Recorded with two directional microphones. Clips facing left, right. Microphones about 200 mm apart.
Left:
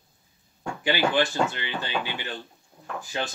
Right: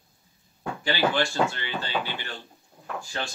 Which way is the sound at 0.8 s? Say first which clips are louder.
Left 2 dB; 20° left (ahead or behind).